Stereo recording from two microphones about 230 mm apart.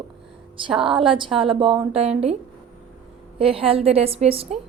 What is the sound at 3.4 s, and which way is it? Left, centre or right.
A woman's voice, right.